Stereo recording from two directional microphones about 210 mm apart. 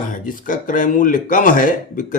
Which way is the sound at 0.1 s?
40° left (ahead or behind).